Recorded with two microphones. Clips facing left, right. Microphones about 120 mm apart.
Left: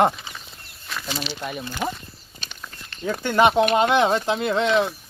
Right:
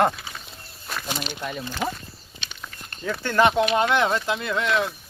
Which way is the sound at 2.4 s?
40° left (ahead or behind).